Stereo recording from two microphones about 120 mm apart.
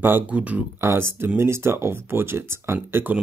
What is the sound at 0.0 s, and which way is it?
Speech, 15° right (ahead or behind).